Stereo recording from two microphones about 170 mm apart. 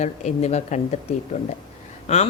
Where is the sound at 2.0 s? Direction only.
40° left (ahead or behind).